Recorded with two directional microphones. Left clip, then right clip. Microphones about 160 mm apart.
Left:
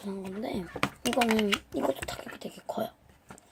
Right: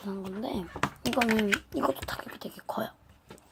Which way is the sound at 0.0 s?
Centre (ahead or behind).